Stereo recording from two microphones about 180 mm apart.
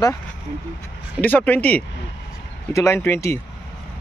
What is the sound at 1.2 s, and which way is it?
Speech, 10° left (ahead or behind).